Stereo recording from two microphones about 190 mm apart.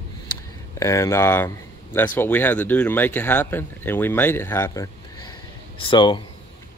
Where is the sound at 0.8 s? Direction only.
15° left (ahead or behind).